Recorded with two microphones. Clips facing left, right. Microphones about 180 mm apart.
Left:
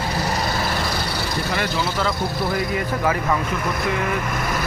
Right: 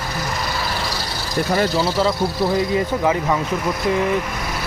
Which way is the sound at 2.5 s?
20° right (ahead or behind).